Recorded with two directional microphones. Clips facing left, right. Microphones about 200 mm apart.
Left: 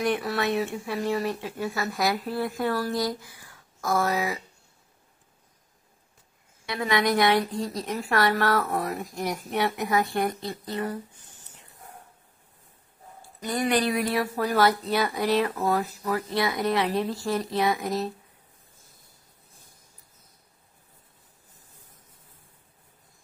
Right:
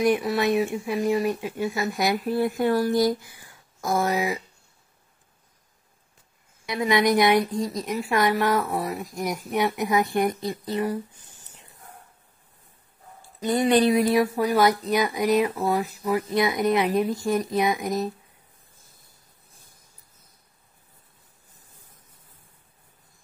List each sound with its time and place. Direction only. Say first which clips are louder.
0.0 s a woman's voice: right 4 dB; 15° right (ahead or behind)
6.7 s a woman's voice: right 3 dB; 15° right (ahead or behind)
13.4 s a woman's voice: right 5 dB; 25° right (ahead or behind)